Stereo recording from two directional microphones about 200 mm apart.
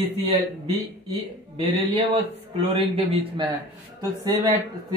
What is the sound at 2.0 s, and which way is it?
Speech, 30° right (ahead or behind).